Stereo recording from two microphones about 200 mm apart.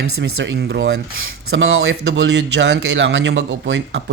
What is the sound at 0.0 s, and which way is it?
Speech, 60° right (ahead or behind).